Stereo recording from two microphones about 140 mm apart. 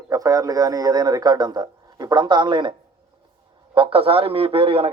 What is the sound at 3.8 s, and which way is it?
A man's voice, 40° right (ahead or behind).